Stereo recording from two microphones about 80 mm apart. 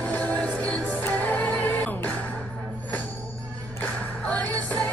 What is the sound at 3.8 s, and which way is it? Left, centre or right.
Music, centre.